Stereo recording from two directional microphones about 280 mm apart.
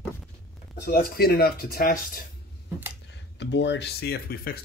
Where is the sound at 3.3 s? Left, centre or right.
Left.